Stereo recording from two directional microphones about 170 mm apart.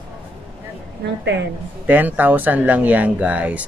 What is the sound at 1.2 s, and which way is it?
Speech, 90° right.